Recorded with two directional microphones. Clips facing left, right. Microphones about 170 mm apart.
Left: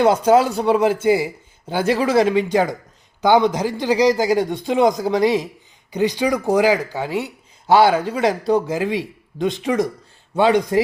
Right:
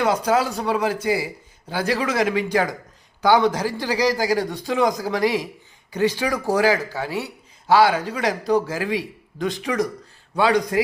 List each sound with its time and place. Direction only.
0.3 s a man's voice: 25° left (ahead or behind)